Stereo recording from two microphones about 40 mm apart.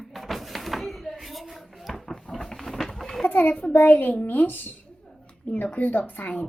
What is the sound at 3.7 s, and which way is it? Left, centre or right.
Speech, left.